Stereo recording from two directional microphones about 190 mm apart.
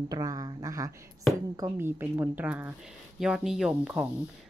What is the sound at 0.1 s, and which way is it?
A woman's voice, 20° right (ahead or behind).